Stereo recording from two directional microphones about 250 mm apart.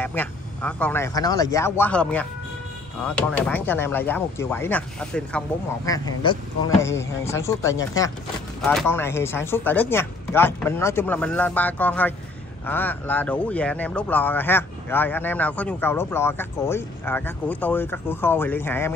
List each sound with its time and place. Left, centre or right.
0.0 s speech: centre